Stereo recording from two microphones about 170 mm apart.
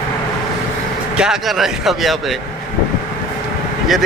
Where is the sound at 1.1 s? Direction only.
5° right (ahead or behind).